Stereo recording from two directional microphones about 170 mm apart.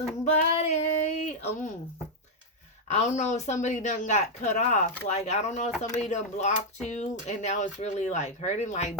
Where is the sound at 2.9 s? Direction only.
45° left (ahead or behind).